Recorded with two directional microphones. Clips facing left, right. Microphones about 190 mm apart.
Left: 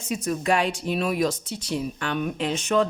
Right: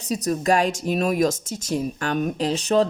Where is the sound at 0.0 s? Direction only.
40° right (ahead or behind).